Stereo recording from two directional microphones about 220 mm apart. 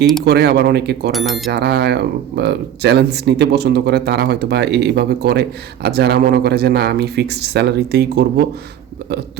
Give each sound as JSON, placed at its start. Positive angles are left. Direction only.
{"t": 0.3, "sound": "speech", "side_deg": -45}
{"t": 1.1, "sound": "speech", "side_deg": 0}
{"t": 1.5, "sound": "speech", "side_deg": -50}